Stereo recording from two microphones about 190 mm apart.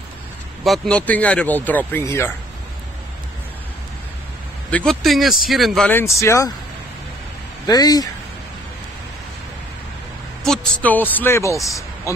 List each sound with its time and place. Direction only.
0.7 s speech: 5° left (ahead or behind)
4.6 s speech: 5° left (ahead or behind)
7.6 s speech: 20° left (ahead or behind)
10.4 s speech: 5° left (ahead or behind)